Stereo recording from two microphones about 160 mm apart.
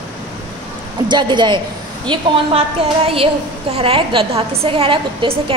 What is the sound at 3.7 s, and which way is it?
A woman's voice, 35° right (ahead or behind).